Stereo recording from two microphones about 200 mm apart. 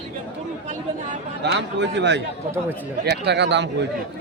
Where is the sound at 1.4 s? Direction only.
60° right (ahead or behind).